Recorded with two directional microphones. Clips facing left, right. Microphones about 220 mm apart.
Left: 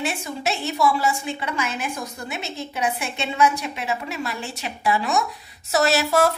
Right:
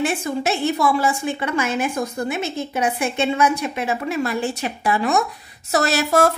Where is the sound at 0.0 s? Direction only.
50° right (ahead or behind).